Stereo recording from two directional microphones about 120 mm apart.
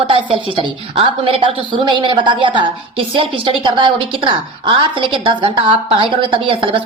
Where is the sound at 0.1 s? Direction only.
45° right (ahead or behind).